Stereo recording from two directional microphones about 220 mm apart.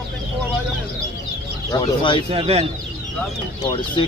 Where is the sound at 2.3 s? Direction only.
30° right (ahead or behind).